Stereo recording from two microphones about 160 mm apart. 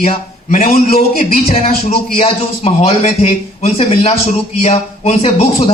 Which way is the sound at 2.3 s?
35° left (ahead or behind).